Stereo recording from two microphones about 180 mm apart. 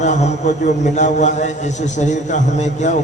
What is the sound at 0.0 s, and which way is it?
A man's voice, 40° left (ahead or behind).